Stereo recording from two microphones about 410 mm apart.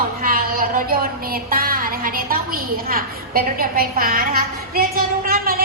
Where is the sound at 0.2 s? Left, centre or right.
Right.